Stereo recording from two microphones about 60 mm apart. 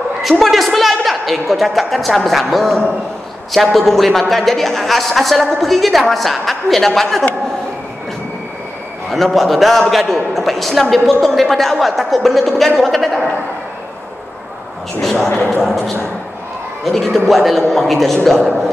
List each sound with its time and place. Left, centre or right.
0.2 s a man's voice: centre
9.1 s a man's voice: centre
15.0 s a man's voice: centre
16.8 s a man's voice: centre